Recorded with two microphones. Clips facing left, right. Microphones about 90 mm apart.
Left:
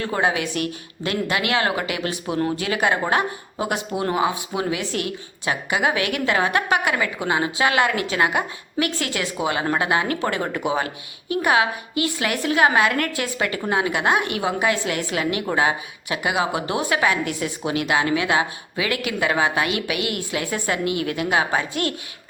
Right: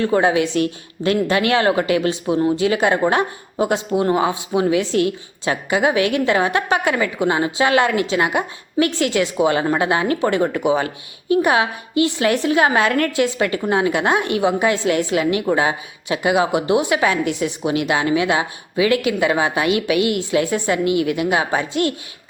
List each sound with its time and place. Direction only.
0.0 s speech: 30° right (ahead or behind)